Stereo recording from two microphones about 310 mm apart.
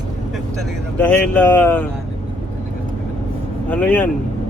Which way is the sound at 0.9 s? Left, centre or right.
Centre.